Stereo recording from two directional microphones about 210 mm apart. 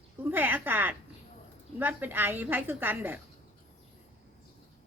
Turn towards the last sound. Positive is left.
turn(degrees=-10)  # may be behind; listen again after turning